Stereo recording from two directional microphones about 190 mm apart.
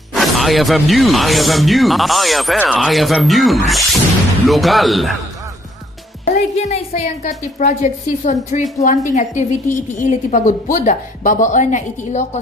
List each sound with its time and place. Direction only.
0.1 s speech: centre (ahead or behind)
6.3 s a woman's voice: 35° left (ahead or behind)